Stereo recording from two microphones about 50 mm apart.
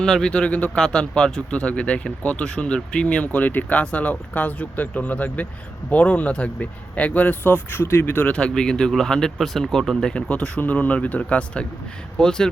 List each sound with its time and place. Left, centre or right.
0.0 s speech: centre
0.8 s speech: centre; by 8.3 s left
8.3 s speech: left
10.2 s speech: left
12.2 s speech: centre